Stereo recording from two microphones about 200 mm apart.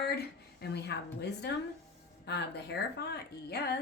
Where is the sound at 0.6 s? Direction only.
55° left (ahead or behind).